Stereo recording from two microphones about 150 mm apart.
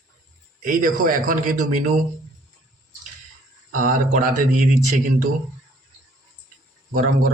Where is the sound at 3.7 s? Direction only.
65° right (ahead or behind).